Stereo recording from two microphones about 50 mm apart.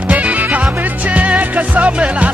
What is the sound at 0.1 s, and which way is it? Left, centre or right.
Music, right.